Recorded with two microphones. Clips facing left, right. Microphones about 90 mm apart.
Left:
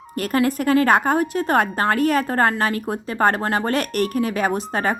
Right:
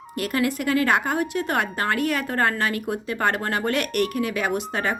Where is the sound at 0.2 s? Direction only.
40° left (ahead or behind).